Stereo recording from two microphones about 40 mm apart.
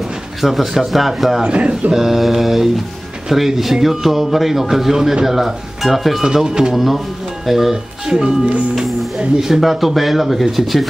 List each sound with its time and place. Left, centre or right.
0.4 s speech: centre
1.4 s a man's voice: right
2.0 s a man's voice: centre
6.2 s a man's voice: centre
6.7 s a man's voice: centre